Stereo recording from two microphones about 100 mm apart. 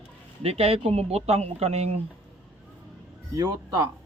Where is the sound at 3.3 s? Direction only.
40° right (ahead or behind).